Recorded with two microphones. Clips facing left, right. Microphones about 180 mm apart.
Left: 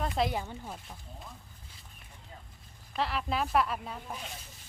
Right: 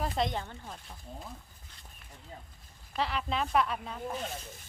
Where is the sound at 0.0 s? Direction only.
5° left (ahead or behind).